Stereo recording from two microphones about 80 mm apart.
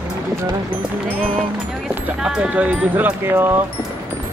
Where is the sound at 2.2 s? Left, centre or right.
Centre; by 3.6 s right.